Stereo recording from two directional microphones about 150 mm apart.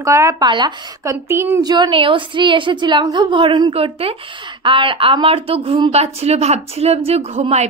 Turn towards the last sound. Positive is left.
turn(degrees=-45)  # may be behind; listen again after turning